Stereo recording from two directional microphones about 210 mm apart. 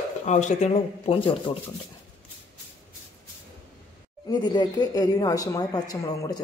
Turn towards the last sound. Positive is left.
turn(degrees=15)  # may be behind; listen again after turning